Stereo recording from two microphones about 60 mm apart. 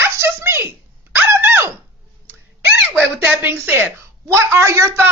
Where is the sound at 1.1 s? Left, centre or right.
Right.